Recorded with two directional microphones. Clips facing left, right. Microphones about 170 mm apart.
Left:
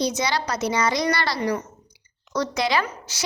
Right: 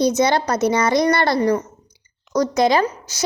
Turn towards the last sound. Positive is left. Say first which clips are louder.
# right 6 dB
turn(degrees=-45)  # may be behind; listen again after turning